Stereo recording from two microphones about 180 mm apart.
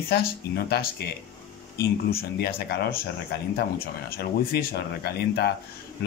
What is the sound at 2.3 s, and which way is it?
Speech, 60° left (ahead or behind).